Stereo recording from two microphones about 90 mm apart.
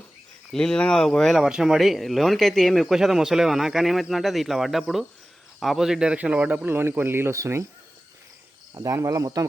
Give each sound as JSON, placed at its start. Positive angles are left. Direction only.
{"t": 0.5, "sound": "speech", "side_deg": 10}
{"t": 6.7, "sound": "speech", "side_deg": -25}
{"t": 8.7, "sound": "cricket", "side_deg": -35}